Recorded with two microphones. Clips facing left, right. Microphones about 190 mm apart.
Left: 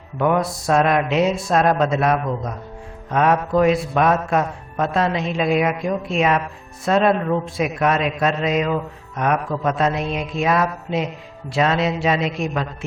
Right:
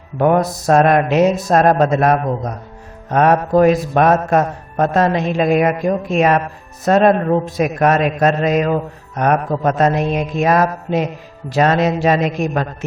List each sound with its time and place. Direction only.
0.2 s a man's voice: 45° right (ahead or behind)